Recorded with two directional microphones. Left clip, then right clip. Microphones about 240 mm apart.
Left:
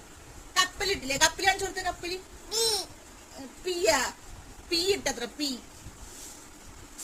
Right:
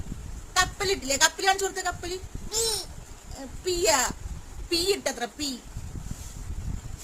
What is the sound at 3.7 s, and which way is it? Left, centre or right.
A woman's voice, right.